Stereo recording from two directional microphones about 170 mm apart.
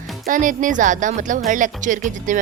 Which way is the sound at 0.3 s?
50° right (ahead or behind).